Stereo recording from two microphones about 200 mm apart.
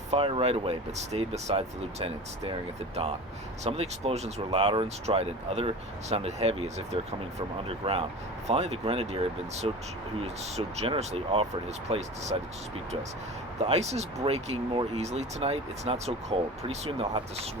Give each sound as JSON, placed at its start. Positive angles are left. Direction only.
{"t": 0.1, "sound": "speech", "side_deg": -30}
{"t": 13.6, "sound": "speech", "side_deg": -35}